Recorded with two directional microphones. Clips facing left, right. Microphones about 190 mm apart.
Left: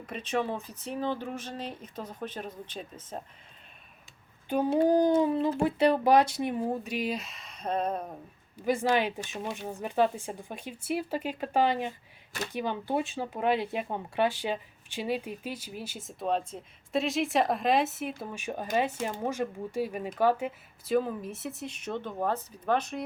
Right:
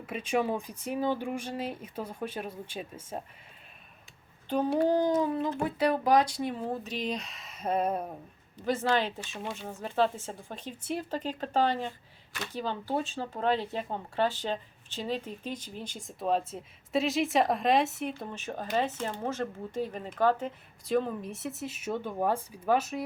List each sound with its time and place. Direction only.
0.0 s speech: 10° right (ahead or behind)
4.4 s speech: 10° left (ahead or behind)
5.1 s a sound: 25° left (ahead or behind)
5.5 s speech: 25° left (ahead or behind); by 8.2 s 5° right (ahead or behind)
8.5 s speech: 10° left (ahead or behind); by 23.0 s 5° right (ahead or behind)